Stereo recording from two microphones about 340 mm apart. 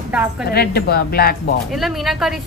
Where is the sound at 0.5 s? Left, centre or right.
Left.